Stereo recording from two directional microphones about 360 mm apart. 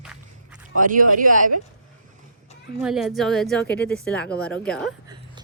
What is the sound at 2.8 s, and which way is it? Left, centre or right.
A woman's voice, centre.